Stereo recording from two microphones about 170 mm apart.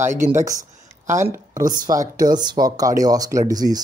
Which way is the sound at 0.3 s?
20° right (ahead or behind).